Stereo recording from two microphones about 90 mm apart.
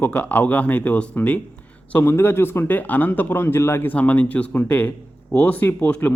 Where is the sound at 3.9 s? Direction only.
15° left (ahead or behind).